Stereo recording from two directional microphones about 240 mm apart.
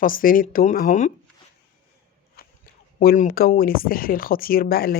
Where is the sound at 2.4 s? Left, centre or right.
Left.